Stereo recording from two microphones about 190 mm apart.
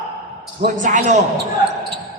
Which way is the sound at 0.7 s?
40° right (ahead or behind).